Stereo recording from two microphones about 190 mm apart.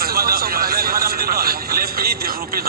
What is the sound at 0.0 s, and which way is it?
Vehicle, 55° right (ahead or behind).